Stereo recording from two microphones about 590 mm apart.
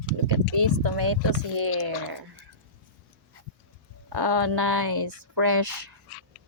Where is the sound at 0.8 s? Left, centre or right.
Right.